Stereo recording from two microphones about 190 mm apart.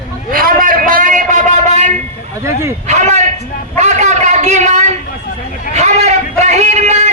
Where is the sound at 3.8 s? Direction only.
35° right (ahead or behind).